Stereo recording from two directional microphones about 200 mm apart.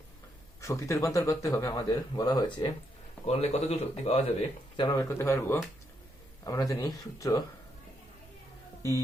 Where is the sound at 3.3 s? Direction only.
35° left (ahead or behind).